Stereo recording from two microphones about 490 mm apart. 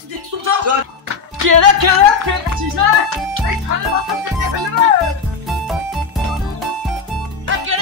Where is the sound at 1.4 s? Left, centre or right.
Right.